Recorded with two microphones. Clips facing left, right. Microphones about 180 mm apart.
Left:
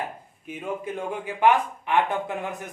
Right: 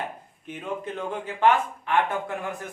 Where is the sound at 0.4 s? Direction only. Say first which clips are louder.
Left 1 dB; 10° left (ahead or behind).